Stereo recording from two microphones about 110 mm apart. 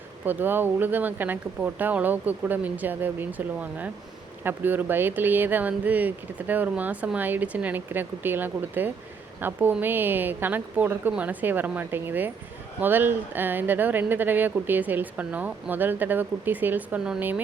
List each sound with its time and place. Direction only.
0.3 s speech: 15° right (ahead or behind)